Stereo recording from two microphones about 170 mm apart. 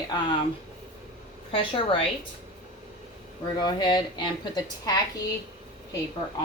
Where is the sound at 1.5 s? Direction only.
30° left (ahead or behind).